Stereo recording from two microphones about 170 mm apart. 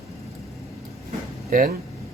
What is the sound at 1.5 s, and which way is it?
Speech, 55° right (ahead or behind).